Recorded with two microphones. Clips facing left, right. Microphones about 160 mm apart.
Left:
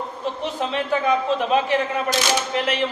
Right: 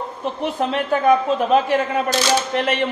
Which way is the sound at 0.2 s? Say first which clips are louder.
Right 4 dB; 55° right (ahead or behind).